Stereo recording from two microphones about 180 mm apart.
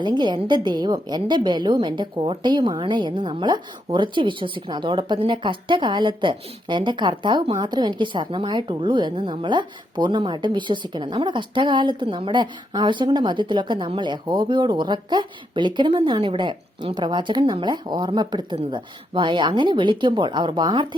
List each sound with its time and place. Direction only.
0.0 s a woman's voice: 25° right (ahead or behind)